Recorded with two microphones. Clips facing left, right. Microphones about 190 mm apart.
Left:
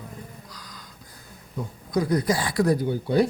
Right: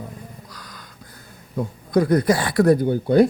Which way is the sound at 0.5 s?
65° right (ahead or behind).